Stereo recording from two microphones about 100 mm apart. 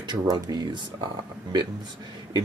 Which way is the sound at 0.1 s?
45° right (ahead or behind).